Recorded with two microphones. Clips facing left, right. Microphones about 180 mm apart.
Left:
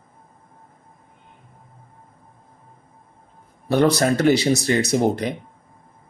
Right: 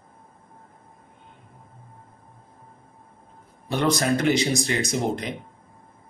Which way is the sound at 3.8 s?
35° left (ahead or behind).